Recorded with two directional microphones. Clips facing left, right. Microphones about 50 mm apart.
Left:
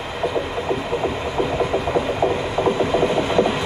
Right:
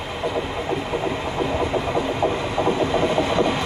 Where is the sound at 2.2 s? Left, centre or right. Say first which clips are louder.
Left 2 dB; left.